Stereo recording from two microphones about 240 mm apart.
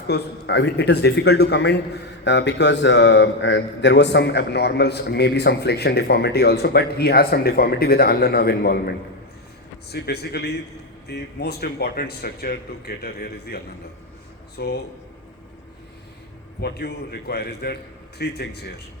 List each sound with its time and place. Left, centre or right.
0.1 s a man's voice: left
9.9 s speech: left
14.6 s a man's voice: left
16.6 s a man's voice: left